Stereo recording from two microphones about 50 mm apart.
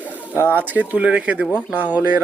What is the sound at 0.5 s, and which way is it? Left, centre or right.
Speech, right.